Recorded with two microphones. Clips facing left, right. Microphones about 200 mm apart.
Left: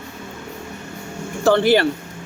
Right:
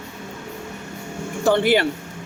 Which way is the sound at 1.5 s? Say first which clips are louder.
Left 2 dB; 15° right (ahead or behind).